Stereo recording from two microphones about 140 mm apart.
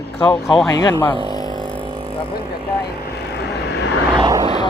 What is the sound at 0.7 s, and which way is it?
Speech, 25° left (ahead or behind).